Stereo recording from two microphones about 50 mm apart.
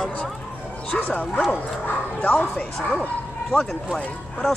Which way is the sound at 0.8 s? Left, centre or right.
Left.